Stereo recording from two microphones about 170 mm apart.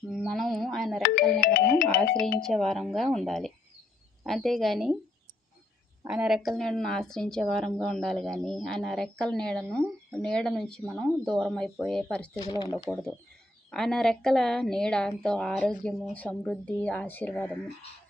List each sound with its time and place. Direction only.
0.1 s a sound: centre (ahead or behind)
1.4 s music: 55° left (ahead or behind)
2.4 s a woman's voice: centre (ahead or behind)
6.1 s a woman's voice: 5° right (ahead or behind)
12.5 s speech: 25° left (ahead or behind)
12.9 s a woman's voice: 5° left (ahead or behind)